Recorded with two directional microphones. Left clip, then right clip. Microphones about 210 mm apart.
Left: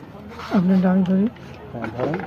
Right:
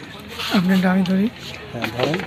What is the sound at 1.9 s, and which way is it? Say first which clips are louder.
Speech: right 3 dB; 40° right (ahead or behind).